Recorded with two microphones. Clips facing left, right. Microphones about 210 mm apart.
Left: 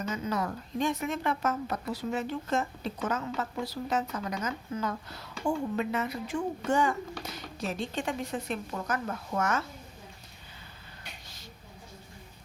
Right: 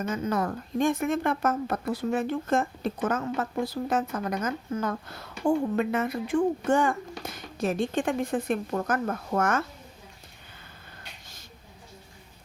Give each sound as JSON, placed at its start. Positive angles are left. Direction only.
{"t": 0.1, "sound": "speech", "side_deg": -50}